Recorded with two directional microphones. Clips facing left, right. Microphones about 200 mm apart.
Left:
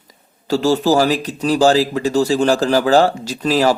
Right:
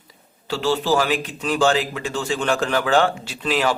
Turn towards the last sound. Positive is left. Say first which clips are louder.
# left 6 dB
turn(degrees=40)  # may be behind; listen again after turning